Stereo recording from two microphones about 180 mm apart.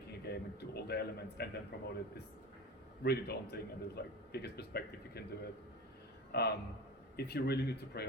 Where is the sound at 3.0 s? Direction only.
65° left (ahead or behind).